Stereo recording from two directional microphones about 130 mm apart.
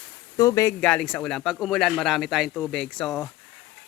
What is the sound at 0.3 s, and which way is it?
Speech, 25° left (ahead or behind).